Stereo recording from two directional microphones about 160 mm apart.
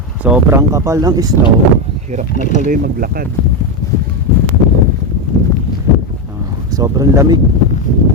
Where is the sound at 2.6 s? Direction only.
60° right (ahead or behind).